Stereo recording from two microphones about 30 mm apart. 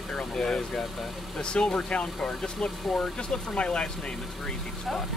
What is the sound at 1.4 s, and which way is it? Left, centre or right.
Speech, left.